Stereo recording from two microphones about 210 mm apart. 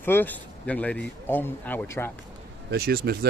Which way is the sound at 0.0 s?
10° left (ahead or behind).